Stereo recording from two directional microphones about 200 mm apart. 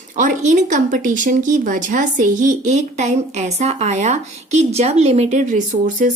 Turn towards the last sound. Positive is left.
turn(degrees=-40)  # may be behind; listen again after turning